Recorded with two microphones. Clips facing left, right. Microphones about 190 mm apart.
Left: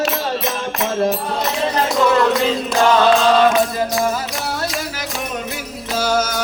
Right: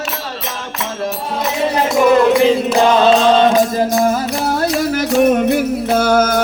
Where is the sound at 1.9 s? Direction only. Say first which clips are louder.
Right 5 dB; 15° right (ahead or behind).